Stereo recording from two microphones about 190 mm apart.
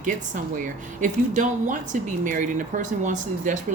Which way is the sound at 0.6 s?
40° right (ahead or behind).